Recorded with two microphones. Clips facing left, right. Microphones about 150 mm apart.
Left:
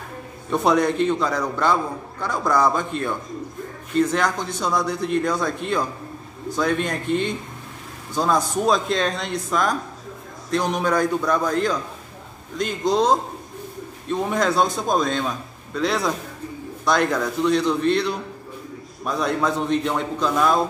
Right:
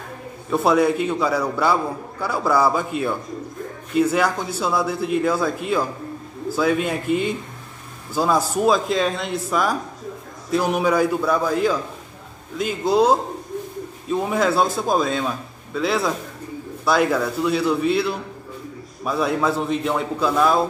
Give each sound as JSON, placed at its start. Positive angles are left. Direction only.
{"t": 0.5, "sound": "a man's voice", "side_deg": -5}